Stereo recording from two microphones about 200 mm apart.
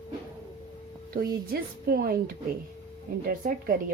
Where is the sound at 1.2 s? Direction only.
50° right (ahead or behind).